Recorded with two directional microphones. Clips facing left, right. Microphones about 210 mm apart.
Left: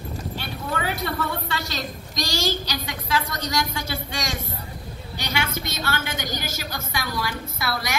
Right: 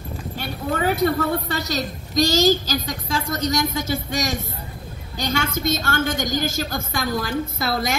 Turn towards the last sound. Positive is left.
turn(degrees=-50)  # may be behind; listen again after turning